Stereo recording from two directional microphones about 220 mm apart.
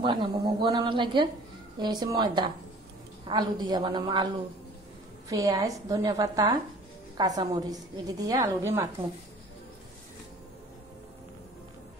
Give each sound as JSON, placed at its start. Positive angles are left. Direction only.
{"t": 0.0, "sound": "a woman's voice", "side_deg": -20}
{"t": 5.3, "sound": "a woman's voice", "side_deg": -15}